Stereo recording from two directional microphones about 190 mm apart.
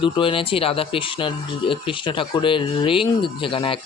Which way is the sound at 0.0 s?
25° left (ahead or behind).